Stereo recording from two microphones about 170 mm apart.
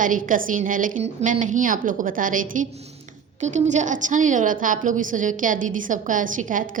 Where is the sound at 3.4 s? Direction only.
45° right (ahead or behind).